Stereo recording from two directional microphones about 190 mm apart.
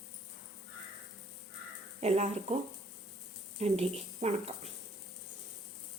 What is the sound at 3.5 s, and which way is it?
Speech, 35° right (ahead or behind).